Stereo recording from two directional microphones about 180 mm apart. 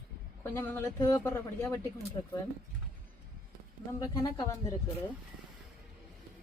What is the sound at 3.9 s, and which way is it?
Speech, 15° left (ahead or behind).